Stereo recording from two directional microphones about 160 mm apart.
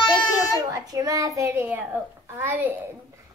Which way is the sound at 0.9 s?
20° right (ahead or behind).